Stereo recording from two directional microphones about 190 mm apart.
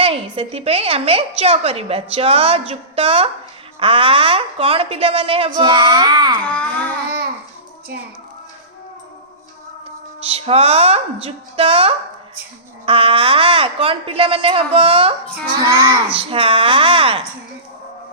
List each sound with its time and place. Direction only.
0.0 s a woman's voice: 30° right (ahead or behind)
6.4 s a sound: 10° left (ahead or behind)
10.2 s a woman's voice: 30° right (ahead or behind)
16.1 s a woman's voice: 30° right (ahead or behind)